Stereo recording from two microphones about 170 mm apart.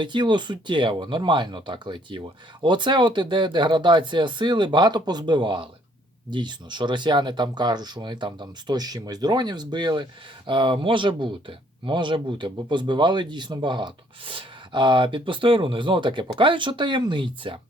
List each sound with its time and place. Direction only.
0.0 s speech: 25° right (ahead or behind)